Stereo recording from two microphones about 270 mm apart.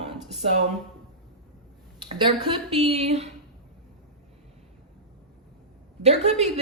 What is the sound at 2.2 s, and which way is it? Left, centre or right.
Speech, centre.